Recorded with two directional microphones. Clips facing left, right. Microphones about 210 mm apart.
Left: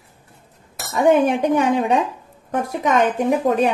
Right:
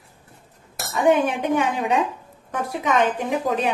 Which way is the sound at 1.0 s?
40° left (ahead or behind).